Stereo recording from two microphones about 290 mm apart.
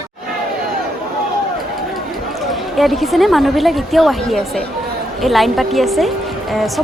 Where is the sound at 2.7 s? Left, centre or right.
Centre.